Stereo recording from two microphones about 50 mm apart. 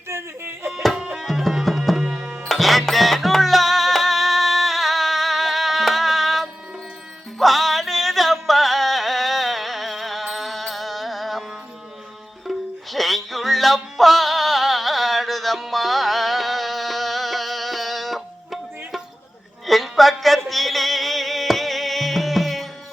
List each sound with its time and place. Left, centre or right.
0.1 s music: right
0.7 s music: centre
12.5 s music: centre